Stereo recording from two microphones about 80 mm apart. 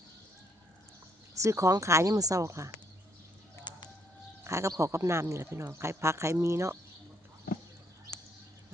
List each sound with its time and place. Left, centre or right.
1.4 s speech: right
3.6 s bird: left
4.4 s speech: right